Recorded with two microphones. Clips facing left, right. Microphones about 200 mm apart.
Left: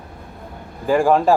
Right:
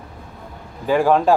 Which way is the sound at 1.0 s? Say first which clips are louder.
Even; 5° left (ahead or behind).